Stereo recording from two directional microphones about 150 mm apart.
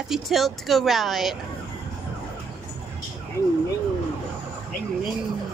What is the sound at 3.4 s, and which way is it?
Speech, 15° left (ahead or behind).